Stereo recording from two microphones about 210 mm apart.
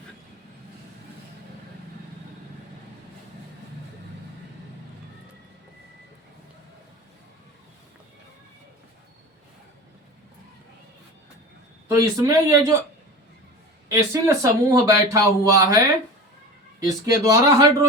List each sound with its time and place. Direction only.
11.9 s speech: 15° right (ahead or behind)
13.8 s speech: 15° right (ahead or behind)
16.8 s speech: 15° right (ahead or behind)